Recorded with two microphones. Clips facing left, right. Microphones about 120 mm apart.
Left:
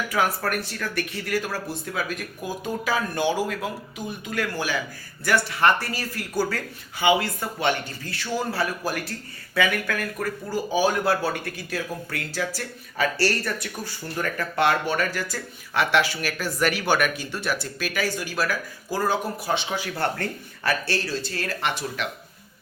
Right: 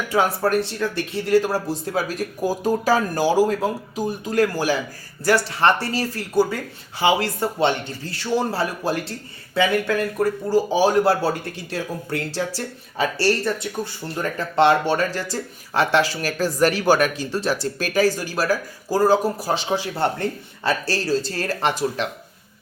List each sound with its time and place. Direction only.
0.1 s speech: 30° right (ahead or behind)
20.0 s speech: 20° right (ahead or behind)
20.8 s speech: 35° right (ahead or behind)